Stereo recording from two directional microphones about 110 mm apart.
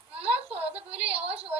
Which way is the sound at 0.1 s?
65° right (ahead or behind).